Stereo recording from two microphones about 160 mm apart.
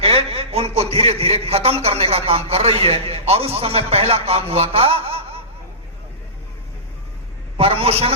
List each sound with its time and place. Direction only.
0.0 s a man's voice: 40° right (ahead or behind)
7.5 s a man's voice: 35° right (ahead or behind)